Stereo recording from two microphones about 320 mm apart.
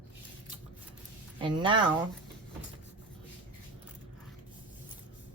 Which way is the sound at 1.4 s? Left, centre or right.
Centre.